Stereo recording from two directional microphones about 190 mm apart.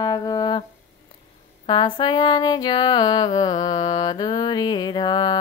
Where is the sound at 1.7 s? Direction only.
25° left (ahead or behind).